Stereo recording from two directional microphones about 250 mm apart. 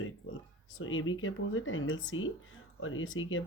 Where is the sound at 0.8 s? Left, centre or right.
Left.